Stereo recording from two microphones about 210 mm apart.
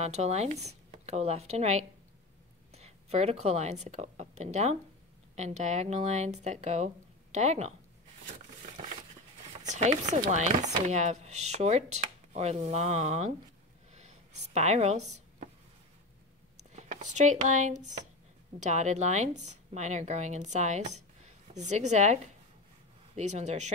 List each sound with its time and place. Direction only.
0.0 s a woman's voice: 30° right (ahead or behind)
9.5 s speech: 35° right (ahead or behind)
13.9 s a sound: 30° right (ahead or behind)
16.7 s speech: 35° right (ahead or behind)